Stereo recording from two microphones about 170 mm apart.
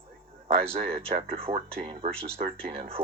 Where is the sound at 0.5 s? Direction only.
35° right (ahead or behind).